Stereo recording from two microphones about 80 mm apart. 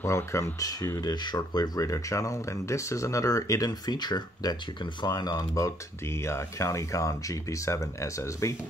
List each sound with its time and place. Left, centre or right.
0.0 s speech: left
1.0 s speech: left
6.2 s speech: left